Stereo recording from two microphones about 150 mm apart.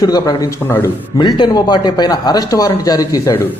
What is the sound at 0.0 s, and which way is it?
Speech, 25° left (ahead or behind).